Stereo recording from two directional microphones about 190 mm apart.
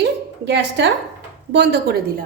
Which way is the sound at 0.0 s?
65° right (ahead or behind).